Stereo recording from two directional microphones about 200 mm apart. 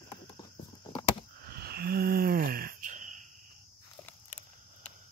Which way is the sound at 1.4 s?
50° right (ahead or behind).